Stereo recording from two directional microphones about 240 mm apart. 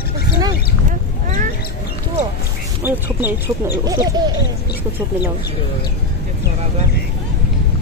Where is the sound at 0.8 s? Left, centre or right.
Right.